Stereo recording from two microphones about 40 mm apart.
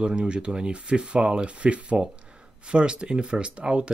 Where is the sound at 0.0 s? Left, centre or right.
Right.